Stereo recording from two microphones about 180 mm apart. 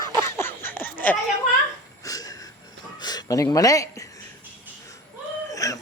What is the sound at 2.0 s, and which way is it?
Wheeze, 20° left (ahead or behind).